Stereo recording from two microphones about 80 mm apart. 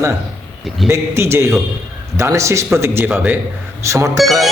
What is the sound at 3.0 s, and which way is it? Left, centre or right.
Speech, right.